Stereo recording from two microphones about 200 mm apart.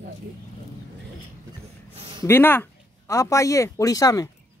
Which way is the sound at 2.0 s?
25° right (ahead or behind).